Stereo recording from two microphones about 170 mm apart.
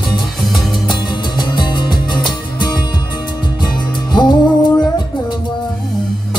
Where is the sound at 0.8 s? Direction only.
25° left (ahead or behind).